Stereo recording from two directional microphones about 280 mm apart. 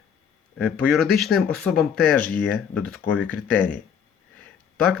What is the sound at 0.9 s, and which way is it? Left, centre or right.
Speech, centre.